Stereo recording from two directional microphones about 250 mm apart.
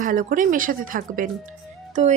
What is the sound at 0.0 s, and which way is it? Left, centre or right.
Speech, right.